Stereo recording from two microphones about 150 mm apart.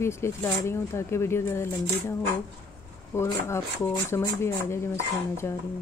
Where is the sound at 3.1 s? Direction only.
20° left (ahead or behind).